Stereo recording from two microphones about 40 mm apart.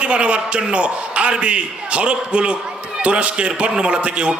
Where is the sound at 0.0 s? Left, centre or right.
Right.